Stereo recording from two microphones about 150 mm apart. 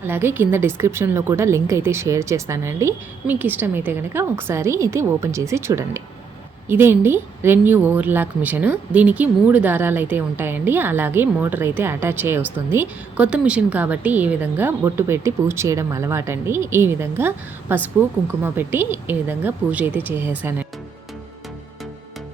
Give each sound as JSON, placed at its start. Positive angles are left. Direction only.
{"t": 0.1, "sound": "a woman's voice", "side_deg": -15}